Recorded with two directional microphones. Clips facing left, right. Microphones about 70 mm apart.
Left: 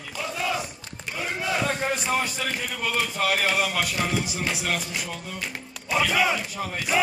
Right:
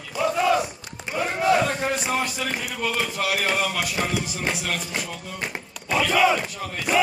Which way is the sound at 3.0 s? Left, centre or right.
Centre.